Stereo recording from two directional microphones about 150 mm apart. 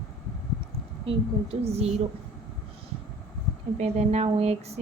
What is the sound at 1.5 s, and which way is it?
Speech, 45° right (ahead or behind).